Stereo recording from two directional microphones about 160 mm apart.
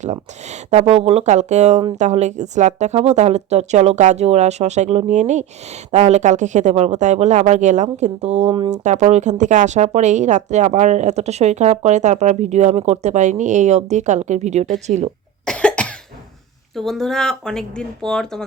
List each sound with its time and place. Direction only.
0.0 s speech: 45° right (ahead or behind)
8.7 s speech: 45° right (ahead or behind)
15.4 s cough: 5° left (ahead or behind)
16.7 s speech: centre (ahead or behind)